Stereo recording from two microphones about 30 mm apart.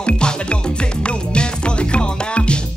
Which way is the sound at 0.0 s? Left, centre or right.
Left.